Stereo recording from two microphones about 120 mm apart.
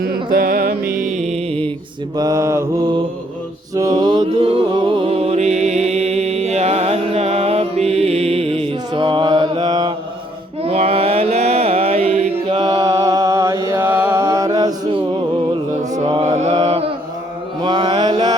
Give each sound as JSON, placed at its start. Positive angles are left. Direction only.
{"t": 1.1, "sound": "music", "side_deg": -70}
{"t": 2.1, "sound": "mantra", "side_deg": -30}
{"t": 3.8, "sound": "mantra", "side_deg": -30}
{"t": 4.4, "sound": "music", "side_deg": -50}
{"t": 8.9, "sound": "mantra", "side_deg": -45}
{"t": 10.6, "sound": "mantra", "side_deg": -60}
{"t": 16.2, "sound": "mantra", "side_deg": -60}
{"t": 17.6, "sound": "mantra", "side_deg": -40}